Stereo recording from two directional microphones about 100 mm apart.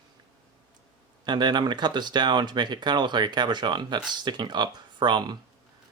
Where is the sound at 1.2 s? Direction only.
45° right (ahead or behind).